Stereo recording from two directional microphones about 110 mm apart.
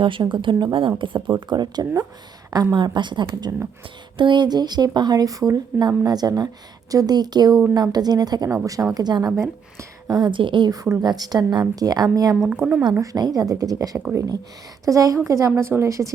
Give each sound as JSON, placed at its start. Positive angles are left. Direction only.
{"t": 0.0, "sound": "speech", "side_deg": -50}
{"t": 9.3, "sound": "speech", "side_deg": -25}
{"t": 10.2, "sound": "speech", "side_deg": -45}
{"t": 10.8, "sound": "speech", "side_deg": -30}
{"t": 12.5, "sound": "speech", "side_deg": -15}
{"t": 13.0, "sound": "a woman's voice", "side_deg": -35}